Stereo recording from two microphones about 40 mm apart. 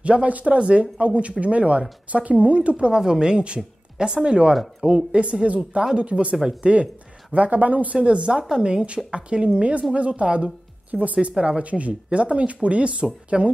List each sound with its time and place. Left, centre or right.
0.0 s speech: right
2.9 s speech: centre; by 8.0 s right
8.0 s a woman's voice: right
11.3 s speech: right
11.6 s speech: right